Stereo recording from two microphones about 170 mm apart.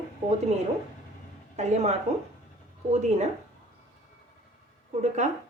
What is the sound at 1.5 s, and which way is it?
A woman's voice, 40° right (ahead or behind).